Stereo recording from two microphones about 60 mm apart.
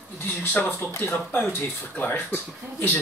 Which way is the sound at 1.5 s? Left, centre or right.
Left.